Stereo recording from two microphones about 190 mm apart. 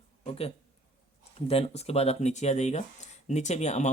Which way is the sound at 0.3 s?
30° left (ahead or behind).